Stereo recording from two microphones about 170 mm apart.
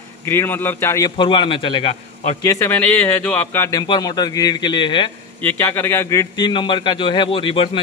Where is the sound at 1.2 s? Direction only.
30° left (ahead or behind).